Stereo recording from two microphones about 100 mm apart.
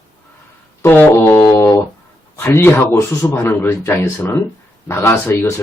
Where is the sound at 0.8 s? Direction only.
25° left (ahead or behind).